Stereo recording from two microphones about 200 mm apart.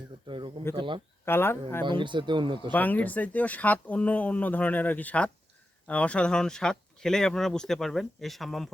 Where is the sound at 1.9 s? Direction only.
25° right (ahead or behind).